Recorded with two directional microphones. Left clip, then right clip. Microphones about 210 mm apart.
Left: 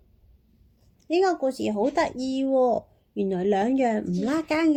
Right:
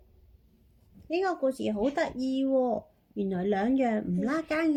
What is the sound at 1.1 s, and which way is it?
Speech, 30° left (ahead or behind).